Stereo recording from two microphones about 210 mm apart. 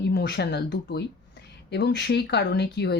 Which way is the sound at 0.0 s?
50° left (ahead or behind).